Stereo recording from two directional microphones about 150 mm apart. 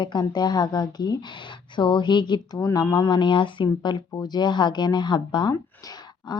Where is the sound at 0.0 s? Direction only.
30° left (ahead or behind).